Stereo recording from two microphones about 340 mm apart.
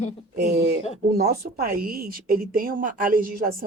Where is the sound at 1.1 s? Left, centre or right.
Right.